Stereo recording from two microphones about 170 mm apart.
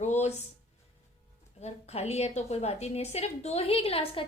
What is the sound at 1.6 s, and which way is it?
A woman's voice, 40° left (ahead or behind).